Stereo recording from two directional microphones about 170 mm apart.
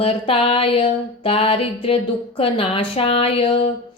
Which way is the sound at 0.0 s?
35° left (ahead or behind).